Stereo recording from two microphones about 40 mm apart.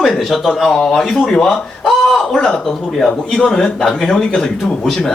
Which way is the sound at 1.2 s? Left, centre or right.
Centre.